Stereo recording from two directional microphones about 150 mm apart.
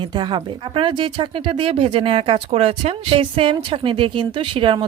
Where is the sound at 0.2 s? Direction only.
30° right (ahead or behind).